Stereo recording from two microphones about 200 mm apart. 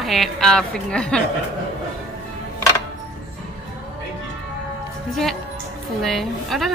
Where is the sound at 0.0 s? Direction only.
Centre (ahead or behind).